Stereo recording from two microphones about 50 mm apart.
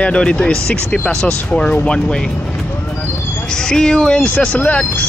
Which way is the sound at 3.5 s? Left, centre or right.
Centre.